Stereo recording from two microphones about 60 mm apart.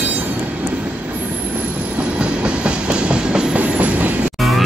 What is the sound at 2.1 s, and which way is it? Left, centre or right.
Train, centre.